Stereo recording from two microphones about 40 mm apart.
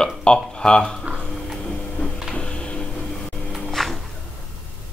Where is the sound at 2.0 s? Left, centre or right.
Left.